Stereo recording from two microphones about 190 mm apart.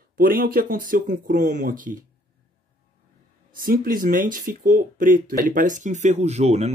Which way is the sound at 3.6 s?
50° right (ahead or behind).